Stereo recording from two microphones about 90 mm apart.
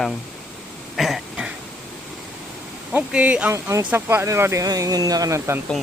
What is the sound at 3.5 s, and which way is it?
Speech, 30° right (ahead or behind).